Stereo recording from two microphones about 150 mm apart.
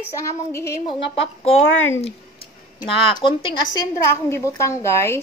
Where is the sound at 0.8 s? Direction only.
40° left (ahead or behind).